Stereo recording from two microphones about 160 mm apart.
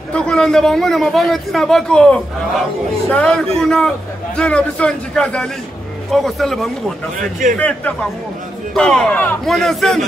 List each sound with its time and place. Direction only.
0.1 s a man's voice: 5° left (ahead or behind)
7.2 s a man's voice: 55° right (ahead or behind)
7.5 s speech: 10° left (ahead or behind)
9.5 s a man's voice: centre (ahead or behind)